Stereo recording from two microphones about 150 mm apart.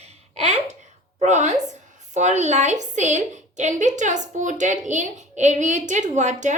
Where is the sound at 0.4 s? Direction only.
50° right (ahead or behind).